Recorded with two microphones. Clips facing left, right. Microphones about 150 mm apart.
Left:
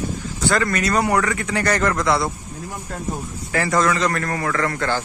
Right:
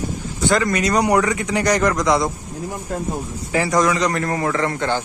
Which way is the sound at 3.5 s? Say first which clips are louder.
Right 2 dB; 15° right (ahead or behind).